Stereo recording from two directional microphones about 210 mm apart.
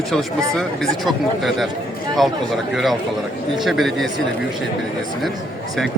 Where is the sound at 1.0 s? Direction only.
Centre (ahead or behind).